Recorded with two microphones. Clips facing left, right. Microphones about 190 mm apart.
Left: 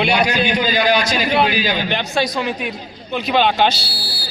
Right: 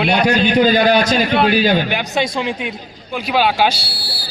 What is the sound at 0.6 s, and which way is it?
A man's voice, 55° right (ahead or behind).